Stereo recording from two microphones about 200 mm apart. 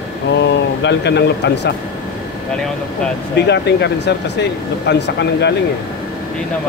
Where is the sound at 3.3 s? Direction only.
60° left (ahead or behind).